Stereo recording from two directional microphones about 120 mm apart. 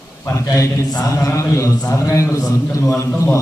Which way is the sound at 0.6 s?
25° left (ahead or behind).